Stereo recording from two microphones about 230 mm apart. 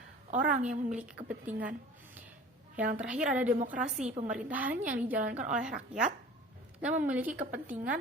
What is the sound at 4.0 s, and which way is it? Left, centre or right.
Speech, right.